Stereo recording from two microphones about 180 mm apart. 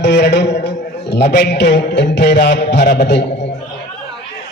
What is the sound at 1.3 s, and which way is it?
Music, 65° left (ahead or behind).